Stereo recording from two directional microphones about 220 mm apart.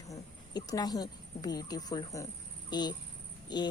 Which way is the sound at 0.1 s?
15° left (ahead or behind).